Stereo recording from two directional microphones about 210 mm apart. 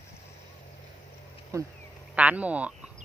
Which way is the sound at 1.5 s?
15° right (ahead or behind).